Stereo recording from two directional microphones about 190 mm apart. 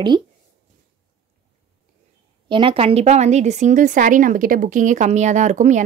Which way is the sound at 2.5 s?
25° right (ahead or behind).